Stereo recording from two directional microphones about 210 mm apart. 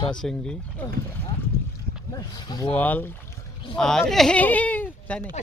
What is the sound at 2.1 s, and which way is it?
Speech, 20° left (ahead or behind).